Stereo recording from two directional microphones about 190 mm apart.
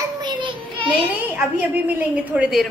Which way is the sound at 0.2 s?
25° right (ahead or behind).